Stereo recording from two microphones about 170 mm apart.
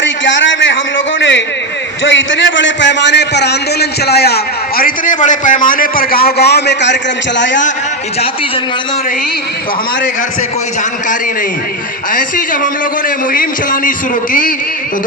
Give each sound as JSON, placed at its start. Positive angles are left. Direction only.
{"t": 0.0, "sound": "a sound", "side_deg": 90}
{"t": 2.0, "sound": "a man's voice", "side_deg": 90}
{"t": 4.8, "sound": "a man's voice", "side_deg": 55}
{"t": 13.3, "sound": "a man's voice", "side_deg": 55}